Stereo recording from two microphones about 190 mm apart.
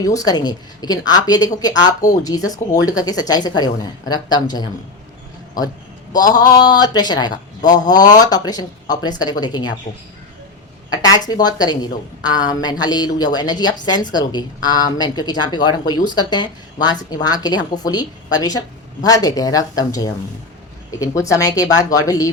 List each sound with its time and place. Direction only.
0.0 s a woman's voice: 20° left (ahead or behind)
6.1 s a woman's voice: 20° left (ahead or behind)
10.9 s a woman's voice: 20° left (ahead or behind)